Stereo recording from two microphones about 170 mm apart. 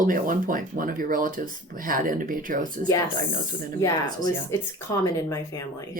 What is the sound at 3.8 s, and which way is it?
Speech, 20° left (ahead or behind).